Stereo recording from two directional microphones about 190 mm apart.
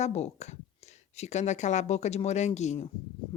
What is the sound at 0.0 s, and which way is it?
Speech, 35° left (ahead or behind).